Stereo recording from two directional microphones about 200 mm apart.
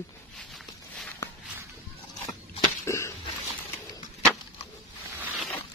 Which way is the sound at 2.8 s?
15° left (ahead or behind).